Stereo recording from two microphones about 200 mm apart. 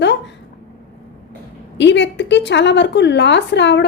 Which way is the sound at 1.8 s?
60° left (ahead or behind).